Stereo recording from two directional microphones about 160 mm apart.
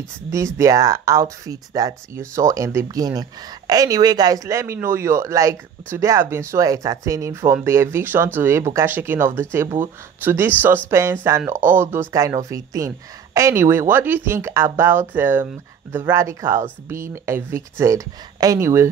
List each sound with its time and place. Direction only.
0.6 s speech: 20° right (ahead or behind)